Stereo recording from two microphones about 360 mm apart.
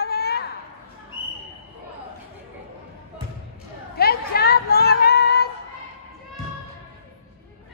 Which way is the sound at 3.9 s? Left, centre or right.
Left.